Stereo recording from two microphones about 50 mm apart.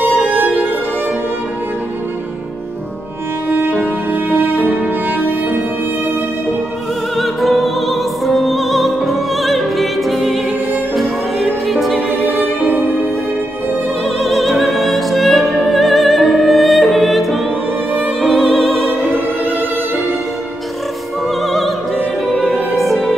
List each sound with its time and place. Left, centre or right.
3.4 s music: right
7.2 s music: centre
12.4 s music: right
14.0 s opera: centre
17.9 s music: centre
21.4 s music: centre
22.3 s music: centre
22.7 s music: centre